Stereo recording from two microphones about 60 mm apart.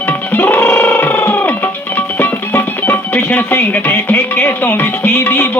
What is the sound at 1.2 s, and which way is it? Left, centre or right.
Music, left.